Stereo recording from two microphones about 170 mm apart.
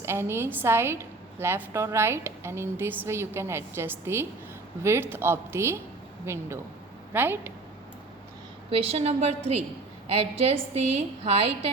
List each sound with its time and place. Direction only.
0.0 s a woman's voice: 15° right (ahead or behind)
8.7 s a woman's voice: 35° right (ahead or behind)